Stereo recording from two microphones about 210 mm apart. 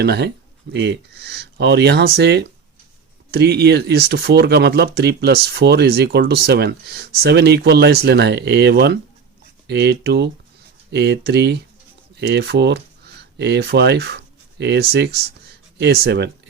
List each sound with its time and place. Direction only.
0.0 s speech: 50° right (ahead or behind)